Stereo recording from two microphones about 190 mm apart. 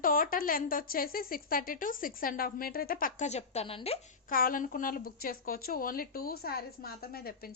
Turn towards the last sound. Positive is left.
turn(degrees=55)  # may be behind; listen again after turning